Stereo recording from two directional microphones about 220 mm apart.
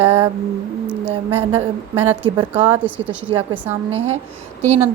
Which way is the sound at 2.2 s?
25° right (ahead or behind).